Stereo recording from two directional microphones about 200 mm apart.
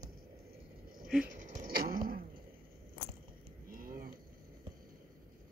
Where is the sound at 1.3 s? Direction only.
40° right (ahead or behind).